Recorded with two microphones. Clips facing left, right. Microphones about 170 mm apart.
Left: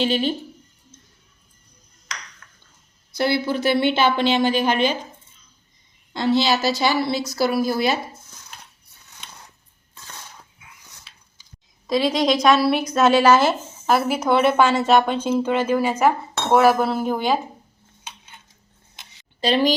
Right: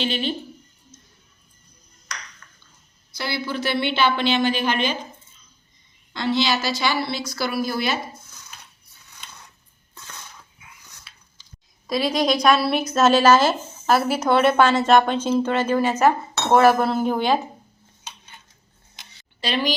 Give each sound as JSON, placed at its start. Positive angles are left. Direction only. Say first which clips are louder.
{"t": 0.0, "sound": "a woman's voice", "louder": "left 5 dB", "side_deg": 40}
{"t": 3.2, "sound": "a woman's voice", "louder": "left 6 dB", "side_deg": 50}
{"t": 4.6, "sound": "a woman's voice", "louder": "left 3 dB", "side_deg": 10}
{"t": 6.2, "sound": "a woman's voice", "louder": "left 3 dB", "side_deg": 35}
{"t": 11.9, "sound": "a woman's voice", "louder": "left 2 dB", "side_deg": 20}
{"t": 16.5, "sound": "dishes", "louder": "even", "side_deg": 5}
{"t": 19.4, "sound": "a woman's voice", "louder": "left 5 dB", "side_deg": 40}